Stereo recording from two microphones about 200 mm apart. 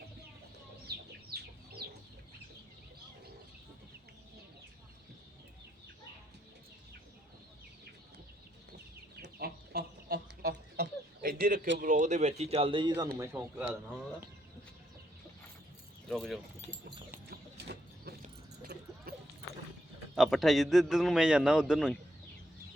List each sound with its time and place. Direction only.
1.3 s chicken: 55° right (ahead or behind)
9.2 s chicken: 55° right (ahead or behind)
11.8 s speech: 40° right (ahead or behind)
13.1 s speech: 10° right (ahead or behind)
16.0 s speech: centre (ahead or behind)
17.2 s a sound: 55° right (ahead or behind)
18.6 s dog: 50° right (ahead or behind)
20.1 s a man's voice: centre (ahead or behind)